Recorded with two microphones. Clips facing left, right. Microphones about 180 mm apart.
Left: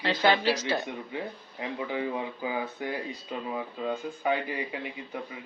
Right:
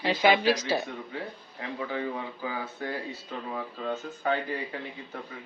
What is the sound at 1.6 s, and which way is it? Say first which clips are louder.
Speech: left 1 dB; 15° left (ahead or behind).